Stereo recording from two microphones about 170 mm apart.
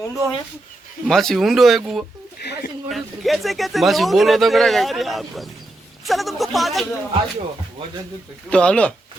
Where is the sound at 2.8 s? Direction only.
Centre (ahead or behind).